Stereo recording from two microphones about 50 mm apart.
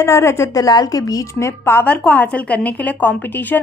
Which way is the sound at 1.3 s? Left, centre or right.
Left.